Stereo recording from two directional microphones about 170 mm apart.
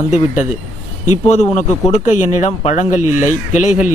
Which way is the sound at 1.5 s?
45° left (ahead or behind).